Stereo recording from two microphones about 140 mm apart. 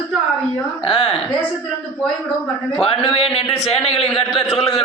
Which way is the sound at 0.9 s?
40° left (ahead or behind).